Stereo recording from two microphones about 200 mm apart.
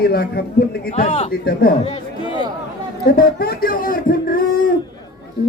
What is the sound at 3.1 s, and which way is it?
Speech, 50° left (ahead or behind).